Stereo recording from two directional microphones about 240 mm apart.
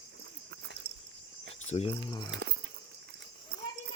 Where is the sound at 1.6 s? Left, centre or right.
Left.